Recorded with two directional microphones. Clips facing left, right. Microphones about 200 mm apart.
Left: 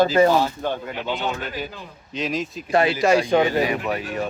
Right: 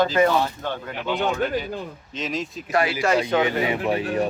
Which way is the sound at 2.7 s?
25° left (ahead or behind).